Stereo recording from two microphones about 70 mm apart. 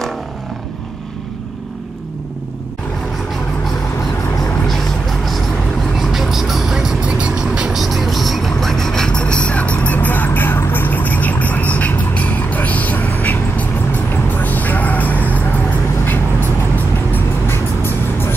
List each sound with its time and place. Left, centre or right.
5.9 s vehicle: centre; by 13.7 s left
14.4 s music: left
17.1 s music: left